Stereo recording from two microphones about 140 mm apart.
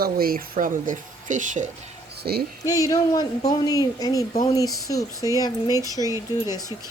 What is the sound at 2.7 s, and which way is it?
Speech, 25° left (ahead or behind).